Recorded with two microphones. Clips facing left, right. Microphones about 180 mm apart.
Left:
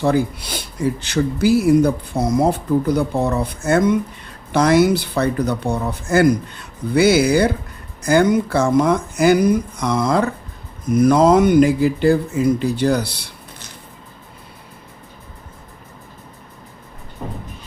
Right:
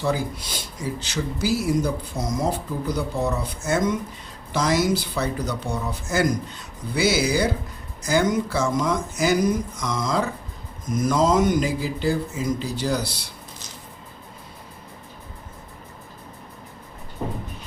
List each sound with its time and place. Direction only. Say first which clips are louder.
0.0 s speech: left 7 dB; 55° left (ahead or behind)